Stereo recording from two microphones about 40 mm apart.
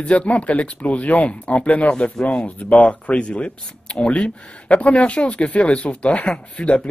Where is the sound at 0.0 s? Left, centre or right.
Left.